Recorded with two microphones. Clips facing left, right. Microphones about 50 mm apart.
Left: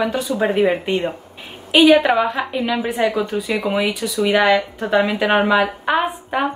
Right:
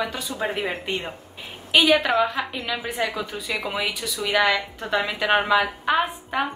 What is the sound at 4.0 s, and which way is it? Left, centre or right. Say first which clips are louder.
Speech: left 4 dB; left.